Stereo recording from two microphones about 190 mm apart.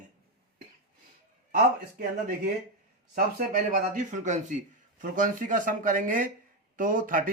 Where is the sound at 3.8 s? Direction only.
45° right (ahead or behind).